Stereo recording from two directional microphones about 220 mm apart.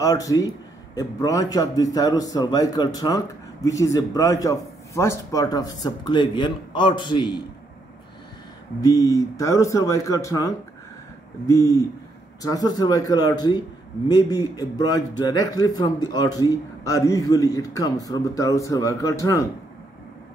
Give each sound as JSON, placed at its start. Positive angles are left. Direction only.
{"t": 0.0, "sound": "a man's voice", "side_deg": 15}
{"t": 8.8, "sound": "a man's voice", "side_deg": 15}